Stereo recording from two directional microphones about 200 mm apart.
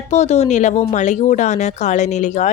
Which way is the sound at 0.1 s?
35° left (ahead or behind).